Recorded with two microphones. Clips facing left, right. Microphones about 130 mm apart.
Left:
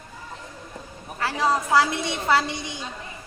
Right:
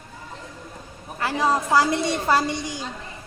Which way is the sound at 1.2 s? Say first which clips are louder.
Right 1 dB; 20° right (ahead or behind).